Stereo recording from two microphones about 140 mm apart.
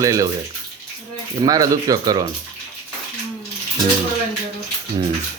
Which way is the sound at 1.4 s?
25° right (ahead or behind).